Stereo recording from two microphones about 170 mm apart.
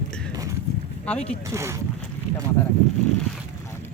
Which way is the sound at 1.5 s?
15° right (ahead or behind).